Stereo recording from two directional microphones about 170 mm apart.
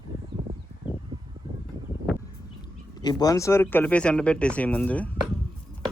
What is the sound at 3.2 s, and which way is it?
Speech, 20° left (ahead or behind).